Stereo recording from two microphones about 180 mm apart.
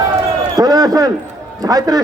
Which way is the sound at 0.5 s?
20° right (ahead or behind).